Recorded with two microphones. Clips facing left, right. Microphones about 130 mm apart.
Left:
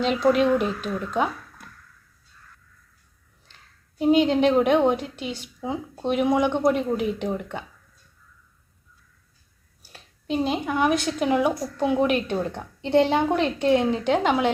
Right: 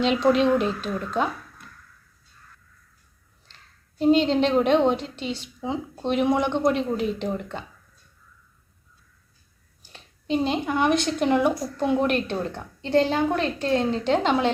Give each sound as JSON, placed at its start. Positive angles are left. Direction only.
{"t": 0.0, "sound": "a woman's voice", "side_deg": 0}
{"t": 3.5, "sound": "a woman's voice", "side_deg": 10}
{"t": 9.8, "sound": "a woman's voice", "side_deg": 5}